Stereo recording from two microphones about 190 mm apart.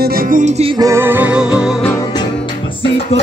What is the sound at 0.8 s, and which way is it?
Music, 15° right (ahead or behind).